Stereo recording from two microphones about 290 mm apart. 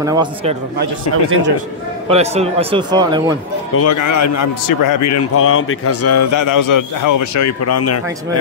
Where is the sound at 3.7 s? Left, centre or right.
Left.